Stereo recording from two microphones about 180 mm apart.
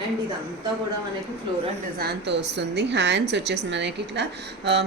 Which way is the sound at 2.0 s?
65° right (ahead or behind).